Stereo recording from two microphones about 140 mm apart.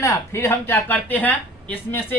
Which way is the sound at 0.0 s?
20° left (ahead or behind).